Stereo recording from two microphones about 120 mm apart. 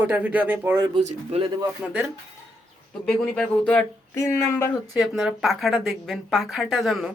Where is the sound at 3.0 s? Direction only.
5° left (ahead or behind).